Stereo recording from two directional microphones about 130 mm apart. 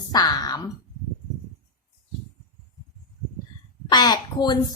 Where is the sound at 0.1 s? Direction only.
30° left (ahead or behind).